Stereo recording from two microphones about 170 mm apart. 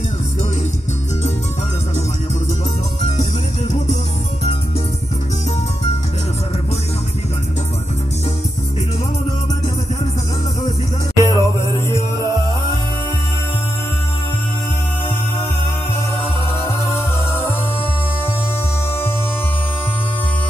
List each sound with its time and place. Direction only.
11.2 s music: 15° left (ahead or behind)
16.6 s music: 15° left (ahead or behind)